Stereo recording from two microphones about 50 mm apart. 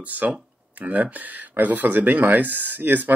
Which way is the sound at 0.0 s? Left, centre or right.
Right.